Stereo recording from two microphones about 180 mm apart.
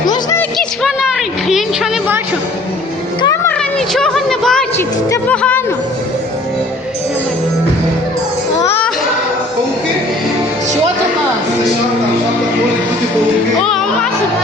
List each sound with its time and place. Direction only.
0.8 s a sound: centre (ahead or behind)
3.2 s music: 20° left (ahead or behind)
3.6 s music: 5° left (ahead or behind)
8.6 s music: 10° left (ahead or behind)
13.6 s music: 5° left (ahead or behind)